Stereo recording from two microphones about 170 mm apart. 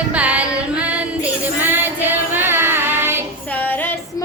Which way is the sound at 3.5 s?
10° left (ahead or behind).